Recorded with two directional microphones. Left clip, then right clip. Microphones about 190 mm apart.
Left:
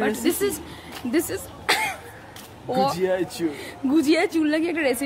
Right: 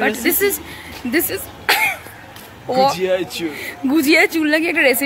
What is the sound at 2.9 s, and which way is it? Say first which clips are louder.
Speech: right 5 dB; 30° left (ahead or behind).